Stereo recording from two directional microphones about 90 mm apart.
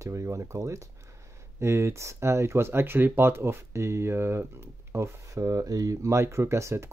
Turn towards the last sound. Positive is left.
turn(degrees=-30)  # may be behind; listen again after turning